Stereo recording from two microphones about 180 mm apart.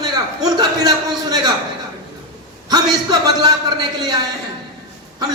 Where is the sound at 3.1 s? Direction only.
25° right (ahead or behind).